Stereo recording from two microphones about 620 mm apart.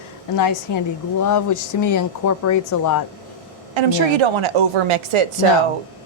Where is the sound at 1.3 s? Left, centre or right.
Left.